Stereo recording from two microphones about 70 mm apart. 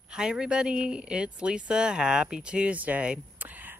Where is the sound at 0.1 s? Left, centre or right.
Centre.